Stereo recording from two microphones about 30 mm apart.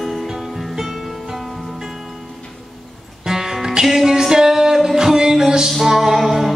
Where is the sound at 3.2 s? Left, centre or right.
Centre.